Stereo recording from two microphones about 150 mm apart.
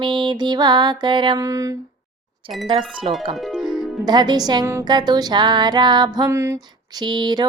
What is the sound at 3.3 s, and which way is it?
Music, centre (ahead or behind).